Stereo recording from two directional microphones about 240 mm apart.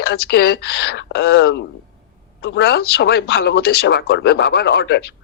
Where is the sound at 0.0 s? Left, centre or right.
Left.